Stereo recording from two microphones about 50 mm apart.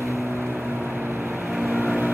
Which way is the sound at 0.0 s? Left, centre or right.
Right.